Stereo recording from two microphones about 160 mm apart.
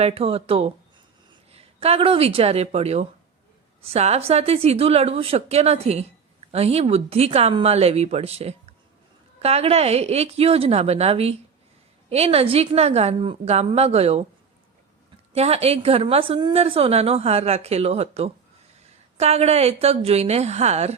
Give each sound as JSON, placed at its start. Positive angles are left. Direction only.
{"t": 0.0, "sound": "a woman's voice", "side_deg": -35}
{"t": 15.3, "sound": "a woman's voice", "side_deg": -40}